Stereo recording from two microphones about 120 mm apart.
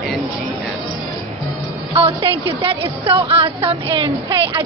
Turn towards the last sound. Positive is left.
turn(degrees=-45)  # may be behind; listen again after turning